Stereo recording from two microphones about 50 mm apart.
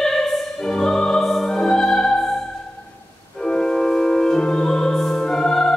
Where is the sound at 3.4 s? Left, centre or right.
Centre.